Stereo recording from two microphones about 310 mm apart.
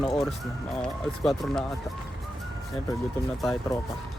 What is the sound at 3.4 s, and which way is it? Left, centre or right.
Speech, centre.